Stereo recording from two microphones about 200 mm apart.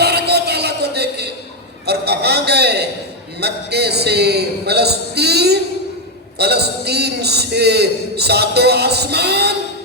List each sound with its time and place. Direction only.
0.0 s music: 55° right (ahead or behind)
1.9 s a sound: 55° right (ahead or behind)
6.4 s a man's voice: 55° right (ahead or behind)